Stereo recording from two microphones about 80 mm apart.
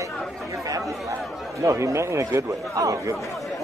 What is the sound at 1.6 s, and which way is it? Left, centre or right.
Speech, right.